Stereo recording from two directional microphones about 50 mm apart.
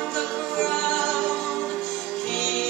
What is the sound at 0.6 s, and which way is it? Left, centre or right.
Music, centre.